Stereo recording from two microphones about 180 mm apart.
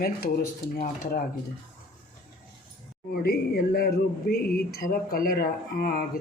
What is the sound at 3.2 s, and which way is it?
Speech, 55° left (ahead or behind).